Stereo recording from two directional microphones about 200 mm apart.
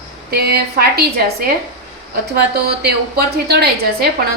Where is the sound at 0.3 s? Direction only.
50° right (ahead or behind).